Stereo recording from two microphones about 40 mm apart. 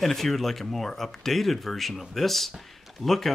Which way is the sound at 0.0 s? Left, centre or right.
Centre.